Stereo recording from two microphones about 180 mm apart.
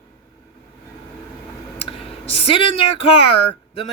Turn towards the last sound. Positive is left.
turn(degrees=30)  # may be behind; listen again after turning